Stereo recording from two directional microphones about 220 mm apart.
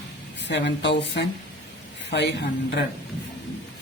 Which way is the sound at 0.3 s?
55° left (ahead or behind).